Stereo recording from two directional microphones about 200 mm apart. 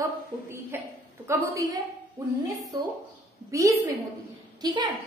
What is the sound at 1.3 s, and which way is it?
Speech, 15° right (ahead or behind).